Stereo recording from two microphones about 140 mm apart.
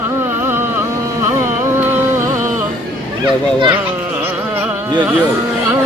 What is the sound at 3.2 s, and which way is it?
Children playing, 35° right (ahead or behind).